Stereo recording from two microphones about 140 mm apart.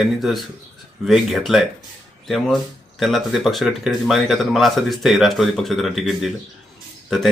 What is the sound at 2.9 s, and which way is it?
Speech, centre (ahead or behind).